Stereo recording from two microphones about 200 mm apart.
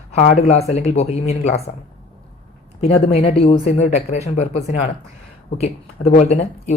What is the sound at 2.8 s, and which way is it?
Speech, 30° left (ahead or behind).